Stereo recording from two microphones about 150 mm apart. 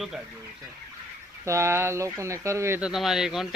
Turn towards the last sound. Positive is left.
turn(degrees=-5)  # may be behind; listen again after turning